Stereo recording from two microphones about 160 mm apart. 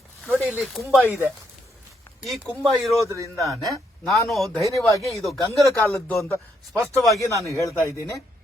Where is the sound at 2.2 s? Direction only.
Centre (ahead or behind).